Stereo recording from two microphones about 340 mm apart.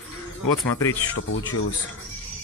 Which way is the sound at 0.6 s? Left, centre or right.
Centre.